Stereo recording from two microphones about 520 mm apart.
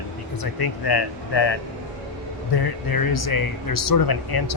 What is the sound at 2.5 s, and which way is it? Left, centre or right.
Speech, left.